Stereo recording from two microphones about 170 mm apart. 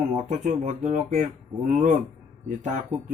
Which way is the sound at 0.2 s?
45° right (ahead or behind).